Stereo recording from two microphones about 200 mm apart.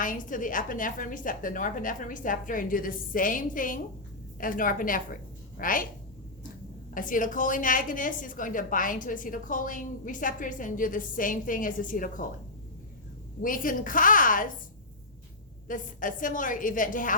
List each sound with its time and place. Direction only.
0.0 s a woman's voice: 40° left (ahead or behind)
6.9 s a woman's voice: 40° left (ahead or behind)
13.4 s a woman's voice: 45° left (ahead or behind)
15.6 s a woman's voice: 40° left (ahead or behind)